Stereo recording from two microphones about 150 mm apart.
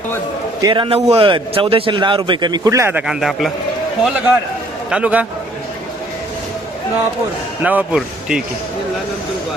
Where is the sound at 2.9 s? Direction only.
5° right (ahead or behind).